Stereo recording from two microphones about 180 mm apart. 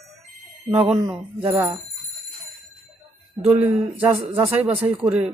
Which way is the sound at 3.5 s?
5° right (ahead or behind).